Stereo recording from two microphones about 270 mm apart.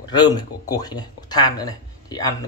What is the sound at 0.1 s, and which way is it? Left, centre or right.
Speech, centre.